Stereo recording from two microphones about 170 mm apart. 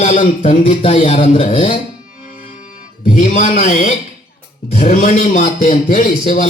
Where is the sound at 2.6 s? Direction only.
55° left (ahead or behind).